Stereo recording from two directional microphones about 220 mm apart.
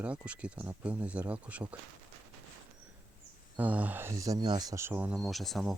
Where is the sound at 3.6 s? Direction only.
5° right (ahead or behind).